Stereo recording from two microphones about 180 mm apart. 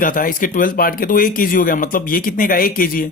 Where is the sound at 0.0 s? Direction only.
50° left (ahead or behind).